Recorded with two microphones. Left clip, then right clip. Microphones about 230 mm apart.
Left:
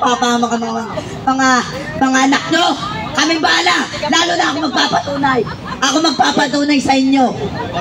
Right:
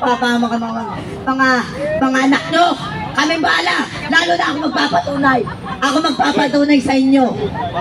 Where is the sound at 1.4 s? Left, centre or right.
Left.